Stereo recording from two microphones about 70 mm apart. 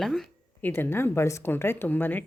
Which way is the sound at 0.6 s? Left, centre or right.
Left.